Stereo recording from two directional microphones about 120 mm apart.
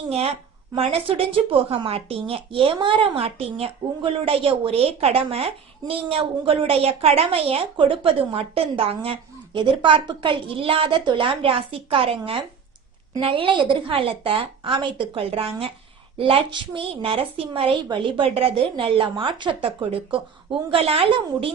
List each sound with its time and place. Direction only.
0.1 s a woman's voice: 60° right (ahead or behind)